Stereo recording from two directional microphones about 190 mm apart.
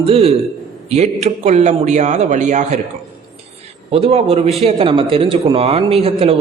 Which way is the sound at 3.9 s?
30° right (ahead or behind).